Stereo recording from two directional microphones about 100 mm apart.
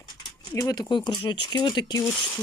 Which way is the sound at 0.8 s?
50° left (ahead or behind).